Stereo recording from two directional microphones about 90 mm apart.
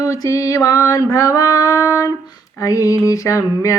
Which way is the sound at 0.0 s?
40° left (ahead or behind).